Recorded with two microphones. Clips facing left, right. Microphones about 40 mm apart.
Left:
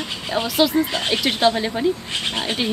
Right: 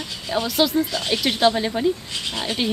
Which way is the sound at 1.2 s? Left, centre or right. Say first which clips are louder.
Even; centre.